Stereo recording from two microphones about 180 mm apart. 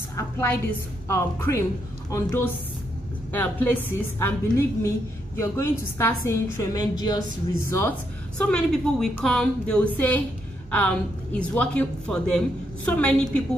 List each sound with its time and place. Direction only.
0.1 s a woman's voice: 15° left (ahead or behind)
7.7 s a woman's voice: 10° left (ahead or behind)
11.3 s a woman's voice: 5° left (ahead or behind)